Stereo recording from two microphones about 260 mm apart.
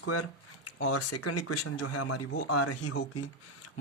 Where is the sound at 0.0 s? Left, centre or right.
Left.